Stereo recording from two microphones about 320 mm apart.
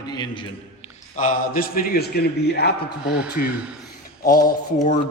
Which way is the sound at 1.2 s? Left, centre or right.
Left.